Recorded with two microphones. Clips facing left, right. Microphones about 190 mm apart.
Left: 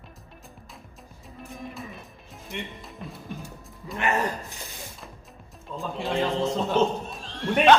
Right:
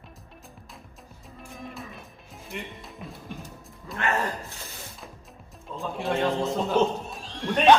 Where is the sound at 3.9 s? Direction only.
20° left (ahead or behind).